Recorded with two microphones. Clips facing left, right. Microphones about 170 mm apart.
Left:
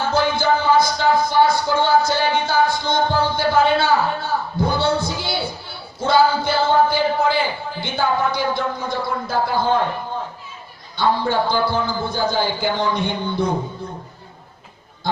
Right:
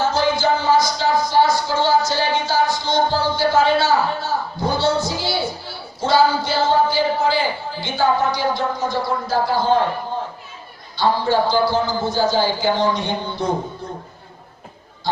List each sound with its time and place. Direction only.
0.1 s music: 55° left (ahead or behind)
10.9 s a man's voice: 55° left (ahead or behind)